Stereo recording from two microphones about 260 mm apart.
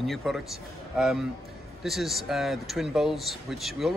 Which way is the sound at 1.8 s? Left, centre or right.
Centre.